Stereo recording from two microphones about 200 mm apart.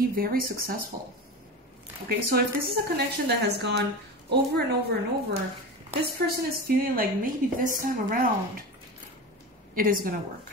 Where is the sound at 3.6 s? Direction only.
60° right (ahead or behind).